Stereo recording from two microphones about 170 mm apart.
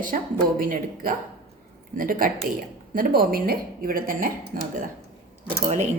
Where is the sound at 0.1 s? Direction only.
50° right (ahead or behind).